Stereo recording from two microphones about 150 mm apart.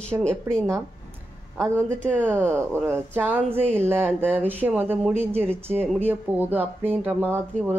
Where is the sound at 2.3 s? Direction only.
15° right (ahead or behind).